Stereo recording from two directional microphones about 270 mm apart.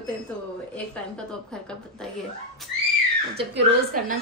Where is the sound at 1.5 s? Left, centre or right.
Centre.